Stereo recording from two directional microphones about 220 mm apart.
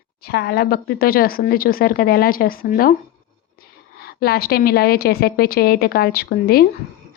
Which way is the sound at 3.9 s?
45° left (ahead or behind).